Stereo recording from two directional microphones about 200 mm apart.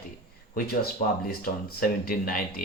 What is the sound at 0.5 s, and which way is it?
Speech, 50° left (ahead or behind).